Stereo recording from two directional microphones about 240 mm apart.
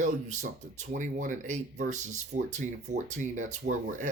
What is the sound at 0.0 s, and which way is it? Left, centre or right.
Speech, right.